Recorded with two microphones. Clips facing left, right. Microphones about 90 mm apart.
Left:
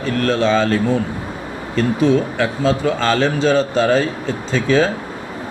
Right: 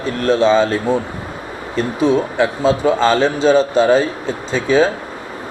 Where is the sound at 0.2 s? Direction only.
20° right (ahead or behind).